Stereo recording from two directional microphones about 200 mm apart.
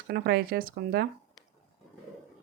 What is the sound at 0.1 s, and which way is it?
Speech, 50° right (ahead or behind).